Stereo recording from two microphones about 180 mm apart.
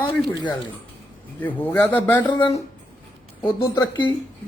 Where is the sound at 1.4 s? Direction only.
10° left (ahead or behind).